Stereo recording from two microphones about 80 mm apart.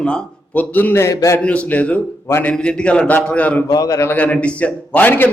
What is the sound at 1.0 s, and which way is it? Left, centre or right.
Speech, left.